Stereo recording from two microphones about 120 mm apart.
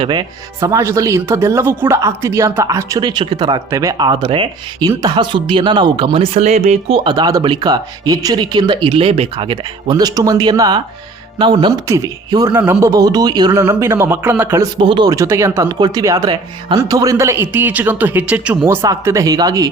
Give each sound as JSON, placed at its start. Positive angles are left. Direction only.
{"t": 0.0, "sound": "speech", "side_deg": -40}
{"t": 0.6, "sound": "speech", "side_deg": -25}
{"t": 11.9, "sound": "speech", "side_deg": -30}
{"t": 14.6, "sound": "speech", "side_deg": -40}
{"t": 15.1, "sound": "speech", "side_deg": -25}